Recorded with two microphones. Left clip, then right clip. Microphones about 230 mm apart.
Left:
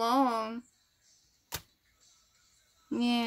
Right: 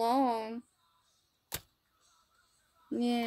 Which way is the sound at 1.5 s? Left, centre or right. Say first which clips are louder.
Left 2 dB; right.